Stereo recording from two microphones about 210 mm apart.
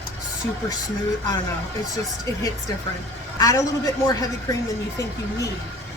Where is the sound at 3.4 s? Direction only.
15° left (ahead or behind).